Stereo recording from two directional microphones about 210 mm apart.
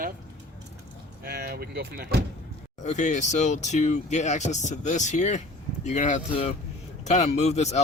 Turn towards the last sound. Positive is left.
turn(degrees=30)  # may be behind; listen again after turning